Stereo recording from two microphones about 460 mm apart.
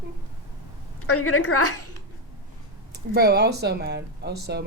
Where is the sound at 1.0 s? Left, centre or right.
Left.